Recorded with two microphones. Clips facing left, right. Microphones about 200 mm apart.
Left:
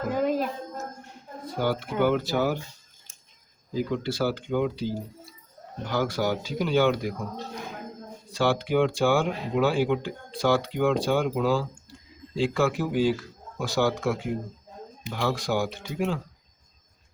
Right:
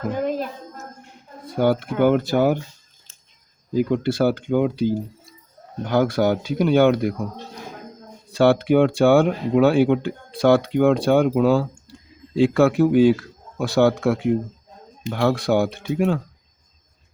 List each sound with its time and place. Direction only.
0.1 s a sound: 5° left (ahead or behind)
1.5 s speech: 55° right (ahead or behind)
3.9 s speech: 55° right (ahead or behind)
8.3 s speech: 60° right (ahead or behind)